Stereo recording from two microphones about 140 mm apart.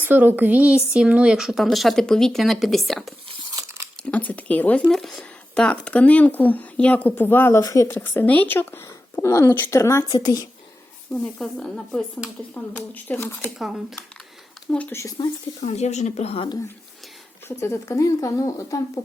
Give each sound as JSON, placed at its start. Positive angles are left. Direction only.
{"t": 0.0, "sound": "speech", "side_deg": -15}
{"t": 11.1, "sound": "speech", "side_deg": 5}
{"t": 13.6, "sound": "speech", "side_deg": -5}
{"t": 14.7, "sound": "speech", "side_deg": 10}
{"t": 15.6, "sound": "speech", "side_deg": 55}
{"t": 17.6, "sound": "speech", "side_deg": 20}